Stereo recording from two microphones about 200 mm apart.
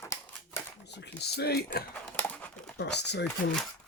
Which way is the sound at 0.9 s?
55° left (ahead or behind).